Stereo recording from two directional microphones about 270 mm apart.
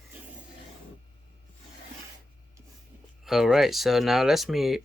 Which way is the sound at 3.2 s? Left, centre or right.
Centre.